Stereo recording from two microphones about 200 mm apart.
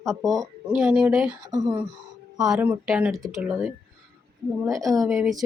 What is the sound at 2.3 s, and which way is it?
A woman's voice, centre (ahead or behind).